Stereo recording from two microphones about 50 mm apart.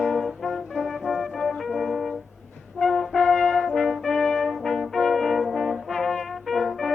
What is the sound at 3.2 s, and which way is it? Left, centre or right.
Brass instrument, centre.